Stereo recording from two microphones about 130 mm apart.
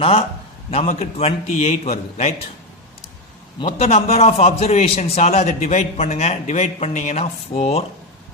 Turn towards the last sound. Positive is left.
turn(degrees=55)  # may be behind; listen again after turning